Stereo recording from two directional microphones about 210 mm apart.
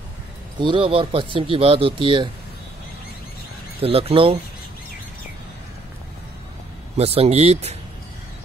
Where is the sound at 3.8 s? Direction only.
25° right (ahead or behind).